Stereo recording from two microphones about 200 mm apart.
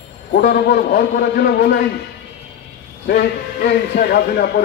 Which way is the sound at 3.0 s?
50° left (ahead or behind).